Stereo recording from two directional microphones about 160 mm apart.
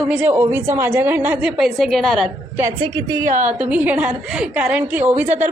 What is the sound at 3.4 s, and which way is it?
A woman's voice, 10° right (ahead or behind).